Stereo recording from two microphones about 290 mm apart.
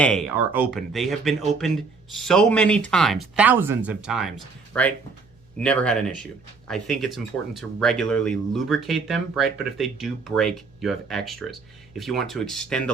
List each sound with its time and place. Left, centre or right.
0.0 s speech: centre